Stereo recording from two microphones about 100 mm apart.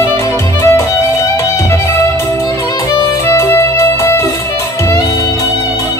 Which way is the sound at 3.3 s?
30° left (ahead or behind).